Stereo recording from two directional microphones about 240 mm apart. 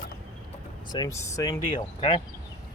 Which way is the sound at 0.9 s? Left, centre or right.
Centre.